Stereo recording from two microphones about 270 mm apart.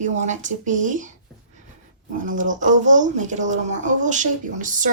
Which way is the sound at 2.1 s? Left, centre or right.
Right.